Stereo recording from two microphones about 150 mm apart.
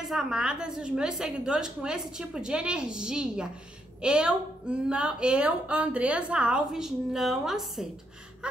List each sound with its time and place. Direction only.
0.0 s a woman's voice: 5° right (ahead or behind)